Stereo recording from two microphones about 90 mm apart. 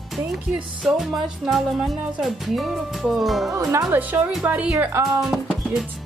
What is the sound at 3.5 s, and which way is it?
Speech, 40° right (ahead or behind).